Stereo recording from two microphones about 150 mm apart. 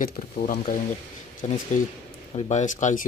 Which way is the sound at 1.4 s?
45° left (ahead or behind).